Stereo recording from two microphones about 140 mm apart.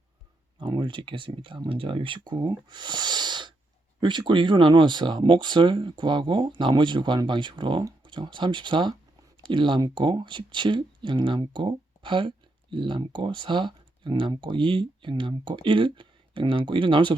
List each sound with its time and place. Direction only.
0.6 s speech: 35° right (ahead or behind)